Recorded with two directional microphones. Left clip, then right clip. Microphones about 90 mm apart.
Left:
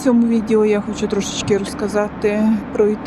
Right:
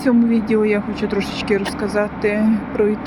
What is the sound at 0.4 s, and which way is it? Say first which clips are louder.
Speech: left 2 dB; 30° left (ahead or behind).